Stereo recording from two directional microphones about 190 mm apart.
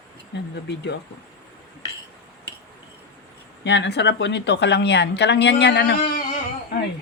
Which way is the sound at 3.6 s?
65° left (ahead or behind).